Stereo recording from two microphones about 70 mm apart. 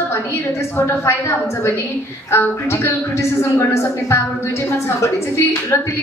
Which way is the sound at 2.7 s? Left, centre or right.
Left.